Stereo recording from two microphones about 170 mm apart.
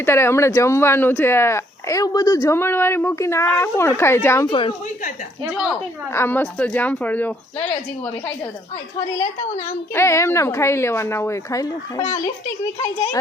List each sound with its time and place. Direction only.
0.0 s speech: 15° left (ahead or behind)
6.1 s speech: 10° left (ahead or behind)
9.9 s speech: 15° left (ahead or behind)